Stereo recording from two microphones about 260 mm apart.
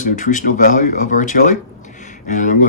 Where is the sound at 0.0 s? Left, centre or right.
Left.